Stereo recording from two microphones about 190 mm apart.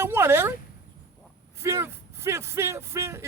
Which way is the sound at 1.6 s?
15° right (ahead or behind).